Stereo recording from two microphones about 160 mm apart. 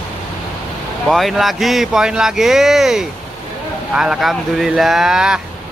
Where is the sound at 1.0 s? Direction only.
Centre (ahead or behind).